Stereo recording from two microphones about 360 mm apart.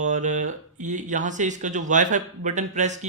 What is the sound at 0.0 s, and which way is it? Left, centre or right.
Speech, centre.